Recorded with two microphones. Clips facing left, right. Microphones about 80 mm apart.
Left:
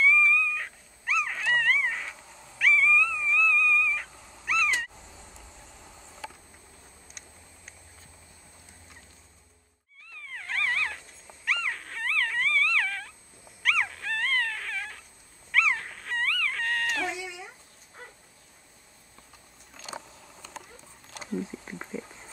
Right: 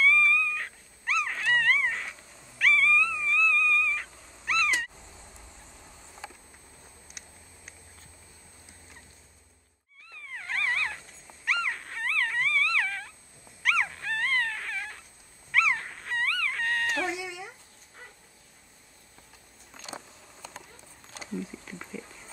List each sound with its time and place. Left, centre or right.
0.0 s dog: centre
10.1 s dog: centre
15.5 s wail: centre
21.4 s a sound: left